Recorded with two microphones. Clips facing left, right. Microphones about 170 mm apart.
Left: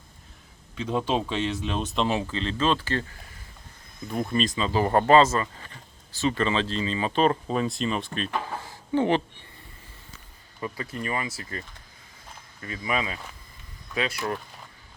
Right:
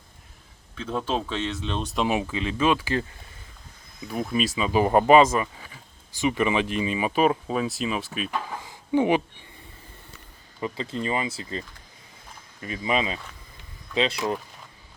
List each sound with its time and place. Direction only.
0.8 s speech: 10° left (ahead or behind)
2.0 s speech: 10° right (ahead or behind)
4.0 s speech: 5° right (ahead or behind)
10.6 s speech: 25° right (ahead or behind)
12.6 s speech: 20° right (ahead or behind)